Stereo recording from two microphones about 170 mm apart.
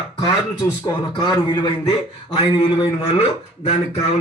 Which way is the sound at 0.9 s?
25° left (ahead or behind).